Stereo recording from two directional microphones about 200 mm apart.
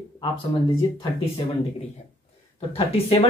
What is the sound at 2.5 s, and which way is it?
Speech, 30° left (ahead or behind).